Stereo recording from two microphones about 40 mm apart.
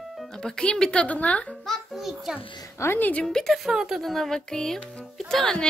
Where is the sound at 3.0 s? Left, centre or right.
Left.